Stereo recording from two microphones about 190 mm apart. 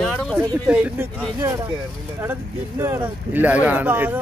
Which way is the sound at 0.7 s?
5° right (ahead or behind).